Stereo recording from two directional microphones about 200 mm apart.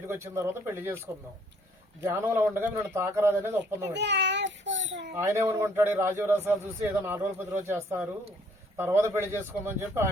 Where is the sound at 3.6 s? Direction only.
60° right (ahead or behind).